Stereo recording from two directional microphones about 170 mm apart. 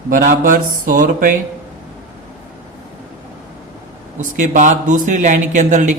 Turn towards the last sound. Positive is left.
turn(degrees=-45)  # may be behind; listen again after turning